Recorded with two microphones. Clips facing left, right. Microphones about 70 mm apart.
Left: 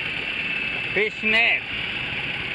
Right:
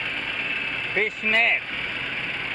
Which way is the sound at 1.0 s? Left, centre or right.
Centre.